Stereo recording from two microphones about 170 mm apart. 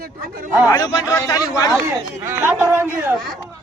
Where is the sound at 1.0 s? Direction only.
15° left (ahead or behind).